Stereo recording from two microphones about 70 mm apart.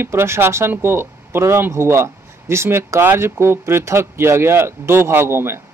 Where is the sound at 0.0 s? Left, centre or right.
Right.